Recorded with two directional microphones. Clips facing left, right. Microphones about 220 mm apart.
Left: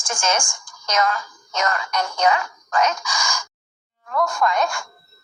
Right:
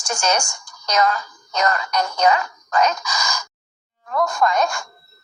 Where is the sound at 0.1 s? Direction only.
40° right (ahead or behind).